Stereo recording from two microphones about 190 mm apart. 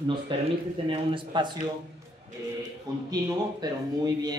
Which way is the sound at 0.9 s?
25° right (ahead or behind).